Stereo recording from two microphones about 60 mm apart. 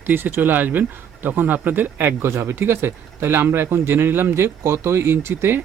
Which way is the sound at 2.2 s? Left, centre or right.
Right.